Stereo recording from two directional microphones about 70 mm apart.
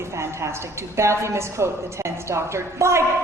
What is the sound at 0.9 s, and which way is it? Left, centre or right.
A woman's voice, right.